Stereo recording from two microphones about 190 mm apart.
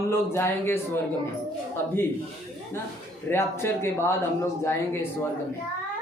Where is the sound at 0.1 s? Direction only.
10° left (ahead or behind).